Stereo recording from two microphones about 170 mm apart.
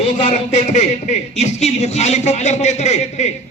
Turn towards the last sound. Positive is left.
turn(degrees=40)  # may be behind; listen again after turning